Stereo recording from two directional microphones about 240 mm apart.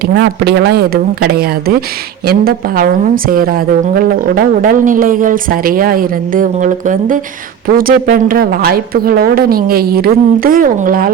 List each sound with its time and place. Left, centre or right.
0.0 s a woman's voice: right